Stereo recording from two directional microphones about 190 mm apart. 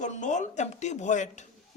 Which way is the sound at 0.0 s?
40° left (ahead or behind).